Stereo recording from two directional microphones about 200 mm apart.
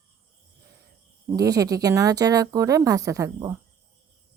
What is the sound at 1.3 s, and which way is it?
Speech, 20° right (ahead or behind).